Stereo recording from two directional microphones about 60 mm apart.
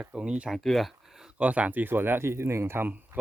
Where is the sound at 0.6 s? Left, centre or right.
Centre.